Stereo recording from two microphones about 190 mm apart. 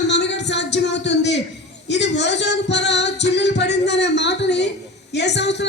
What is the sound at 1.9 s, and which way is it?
Female singing, 65° left (ahead or behind).